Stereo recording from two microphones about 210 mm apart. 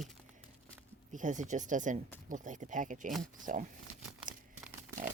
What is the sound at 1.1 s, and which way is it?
Speech, 35° right (ahead or behind).